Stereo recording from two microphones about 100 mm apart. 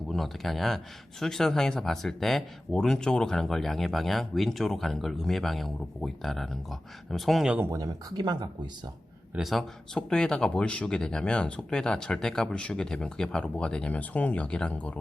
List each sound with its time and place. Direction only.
0.1 s speech: centre (ahead or behind)
7.7 s speech: 40° right (ahead or behind)
9.3 s speech: centre (ahead or behind)